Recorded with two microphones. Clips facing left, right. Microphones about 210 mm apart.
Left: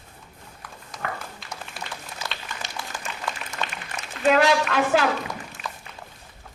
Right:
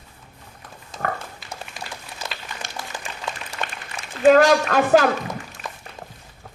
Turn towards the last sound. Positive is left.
turn(degrees=-45)  # may be behind; listen again after turning